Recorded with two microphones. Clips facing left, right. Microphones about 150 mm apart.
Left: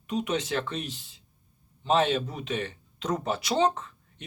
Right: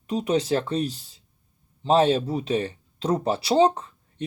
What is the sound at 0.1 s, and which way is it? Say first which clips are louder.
Speech: right 6 dB; 35° right (ahead or behind).